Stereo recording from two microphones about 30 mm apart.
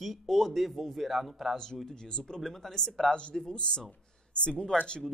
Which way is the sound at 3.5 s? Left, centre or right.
Left.